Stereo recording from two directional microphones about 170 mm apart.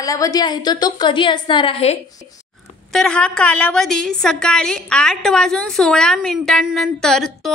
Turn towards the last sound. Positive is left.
turn(degrees=0)  # may be behind; listen again after turning